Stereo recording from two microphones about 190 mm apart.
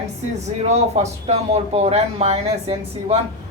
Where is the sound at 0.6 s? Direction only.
35° right (ahead or behind).